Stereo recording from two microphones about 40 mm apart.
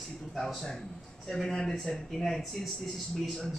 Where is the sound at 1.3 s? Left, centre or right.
Centre.